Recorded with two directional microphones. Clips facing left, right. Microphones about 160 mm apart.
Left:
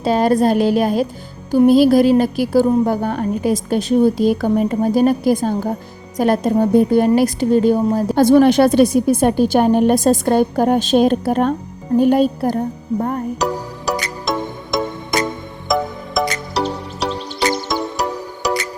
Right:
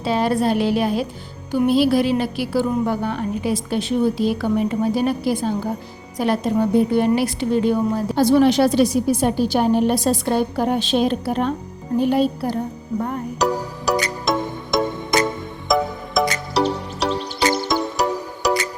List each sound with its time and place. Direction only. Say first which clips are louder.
0.0 s a woman's voice: left 5 dB; 45° left (ahead or behind)
13.4 s music: even; centre (ahead or behind)